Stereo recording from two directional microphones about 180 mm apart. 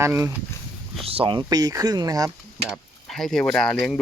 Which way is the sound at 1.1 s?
30° right (ahead or behind).